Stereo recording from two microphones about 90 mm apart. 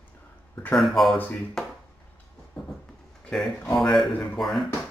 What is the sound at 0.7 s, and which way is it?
Speech, 5° left (ahead or behind).